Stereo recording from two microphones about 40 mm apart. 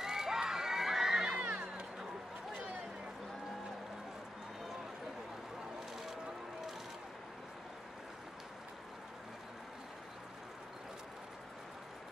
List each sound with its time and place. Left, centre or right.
0.0 s crowd: centre; by 1.9 s right